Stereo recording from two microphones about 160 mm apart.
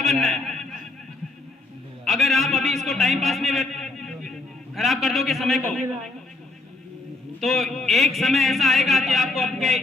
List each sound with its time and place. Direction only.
0.0 s chuckle: centre (ahead or behind)
2.0 s a man's voice: centre (ahead or behind)
7.4 s a man's voice: centre (ahead or behind)